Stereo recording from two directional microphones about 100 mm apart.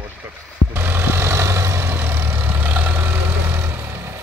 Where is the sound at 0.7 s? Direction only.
20° right (ahead or behind).